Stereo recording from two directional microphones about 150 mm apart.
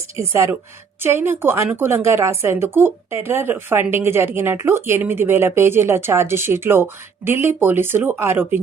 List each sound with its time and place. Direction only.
0.2 s a woman's voice: 20° right (ahead or behind)